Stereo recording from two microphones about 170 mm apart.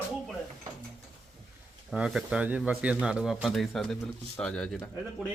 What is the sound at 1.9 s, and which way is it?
Speech, centre (ahead or behind).